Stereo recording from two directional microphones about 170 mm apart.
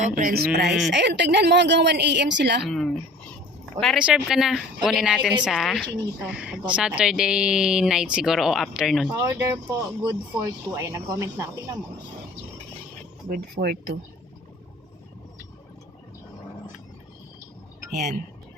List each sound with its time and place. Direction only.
0.2 s speech: 60° right (ahead or behind)
0.9 s a woman's voice: 90° right
2.6 s speech: centre (ahead or behind)
9.0 s speech: 20° right (ahead or behind)
13.2 s speech: 60° right (ahead or behind)
17.9 s speech: 50° right (ahead or behind)